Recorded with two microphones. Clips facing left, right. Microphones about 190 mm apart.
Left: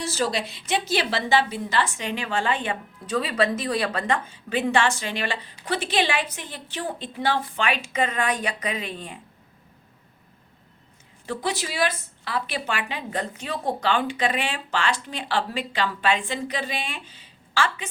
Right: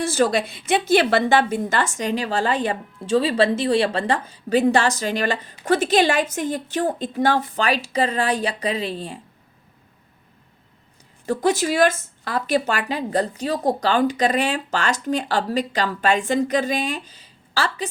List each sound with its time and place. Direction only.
0.0 s a woman's voice: 55° right (ahead or behind); by 9.2 s 30° right (ahead or behind)
11.3 s a woman's voice: 45° right (ahead or behind)